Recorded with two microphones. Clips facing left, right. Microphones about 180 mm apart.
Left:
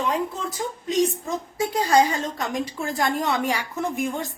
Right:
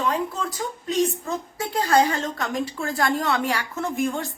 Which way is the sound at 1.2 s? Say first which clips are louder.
Left 2 dB; 15° left (ahead or behind).